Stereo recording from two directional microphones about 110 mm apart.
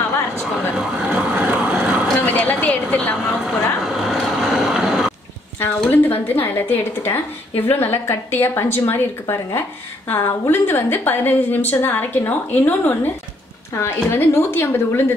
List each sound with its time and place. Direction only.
0.7 s vehicle: 10° right (ahead or behind)
2.1 s a sound: 15° left (ahead or behind)
4.0 s vehicle: centre (ahead or behind)
5.9 s a woman's voice: 20° left (ahead or behind)